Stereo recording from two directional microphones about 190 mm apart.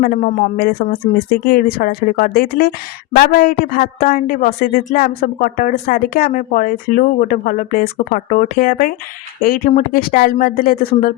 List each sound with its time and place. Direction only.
0.0 s speech: 45° left (ahead or behind)